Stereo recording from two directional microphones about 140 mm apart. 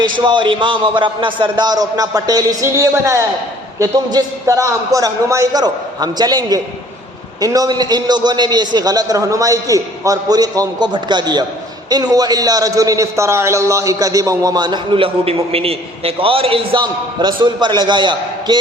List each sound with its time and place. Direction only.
0.0 s a man's voice: 35° right (ahead or behind)